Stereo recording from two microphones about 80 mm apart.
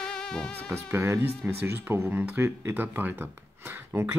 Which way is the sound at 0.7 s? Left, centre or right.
Right.